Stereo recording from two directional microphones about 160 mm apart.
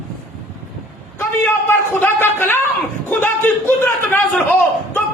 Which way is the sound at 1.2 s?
15° left (ahead or behind).